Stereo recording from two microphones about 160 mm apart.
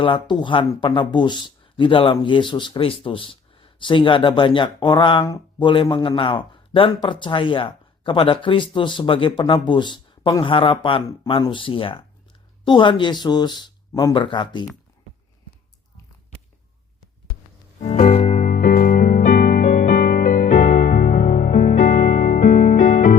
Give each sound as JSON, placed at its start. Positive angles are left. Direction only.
{"t": 0.0, "sound": "speech", "side_deg": 30}
{"t": 17.8, "sound": "music", "side_deg": 45}